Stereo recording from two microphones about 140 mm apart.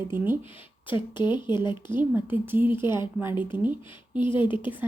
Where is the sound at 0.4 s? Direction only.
40° left (ahead or behind).